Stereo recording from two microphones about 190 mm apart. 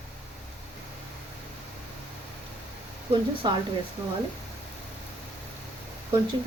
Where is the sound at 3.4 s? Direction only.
20° right (ahead or behind).